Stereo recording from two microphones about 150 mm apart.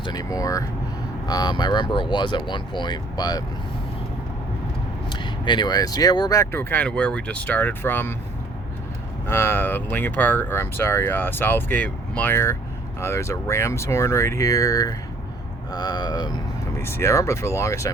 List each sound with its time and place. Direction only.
0.0 s speech: 25° left (ahead or behind)
5.0 s speech: 30° left (ahead or behind); by 8.1 s 15° left (ahead or behind)
9.3 s speech: 15° left (ahead or behind)
16.7 s speech: 15° left (ahead or behind)